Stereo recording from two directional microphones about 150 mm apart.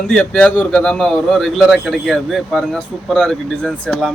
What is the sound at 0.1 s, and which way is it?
A man's voice, 5° left (ahead or behind).